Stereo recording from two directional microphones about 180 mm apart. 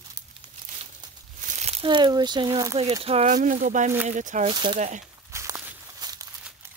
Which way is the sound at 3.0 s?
35° right (ahead or behind).